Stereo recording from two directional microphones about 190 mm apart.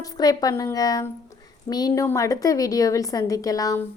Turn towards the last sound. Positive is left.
turn(degrees=20)  # may be behind; listen again after turning